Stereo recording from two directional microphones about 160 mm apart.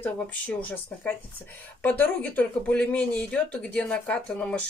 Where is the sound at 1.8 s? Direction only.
10° left (ahead or behind).